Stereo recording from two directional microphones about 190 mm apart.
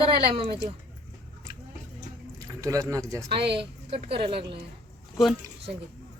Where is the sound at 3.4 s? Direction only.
60° right (ahead or behind).